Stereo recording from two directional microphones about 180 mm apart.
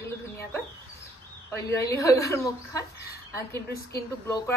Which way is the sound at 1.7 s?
15° left (ahead or behind).